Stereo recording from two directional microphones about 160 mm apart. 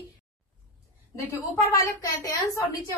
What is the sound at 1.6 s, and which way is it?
A woman's voice, 20° left (ahead or behind).